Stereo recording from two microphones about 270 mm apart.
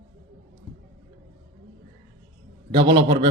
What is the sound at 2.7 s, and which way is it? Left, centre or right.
Speech, centre.